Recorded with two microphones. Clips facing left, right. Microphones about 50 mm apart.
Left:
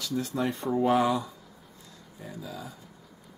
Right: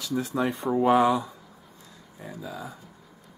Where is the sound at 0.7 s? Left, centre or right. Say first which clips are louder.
Right 4 dB; centre.